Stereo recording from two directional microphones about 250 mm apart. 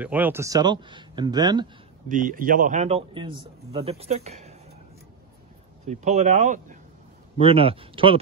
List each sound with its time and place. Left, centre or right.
0.0 s speech: centre
2.0 s a man's voice: right
5.9 s a man's voice: right